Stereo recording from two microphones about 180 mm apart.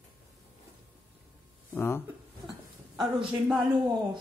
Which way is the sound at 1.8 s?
10° left (ahead or behind).